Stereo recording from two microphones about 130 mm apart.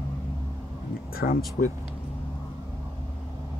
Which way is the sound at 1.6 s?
90° left.